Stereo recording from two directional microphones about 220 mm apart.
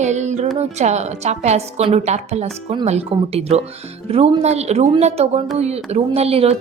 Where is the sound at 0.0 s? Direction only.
30° right (ahead or behind).